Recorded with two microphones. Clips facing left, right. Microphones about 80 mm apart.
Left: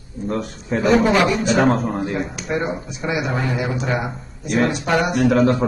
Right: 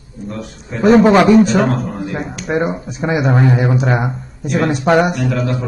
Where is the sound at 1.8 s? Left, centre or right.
Left.